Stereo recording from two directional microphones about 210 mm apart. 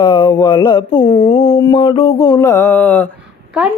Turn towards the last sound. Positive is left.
turn(degrees=10)  # may be behind; listen again after turning